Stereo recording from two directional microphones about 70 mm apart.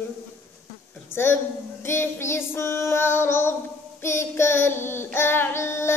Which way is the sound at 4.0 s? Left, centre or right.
Left.